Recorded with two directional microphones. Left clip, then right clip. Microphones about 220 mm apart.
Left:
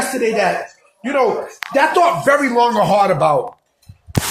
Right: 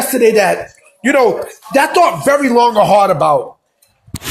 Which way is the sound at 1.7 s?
30° right (ahead or behind).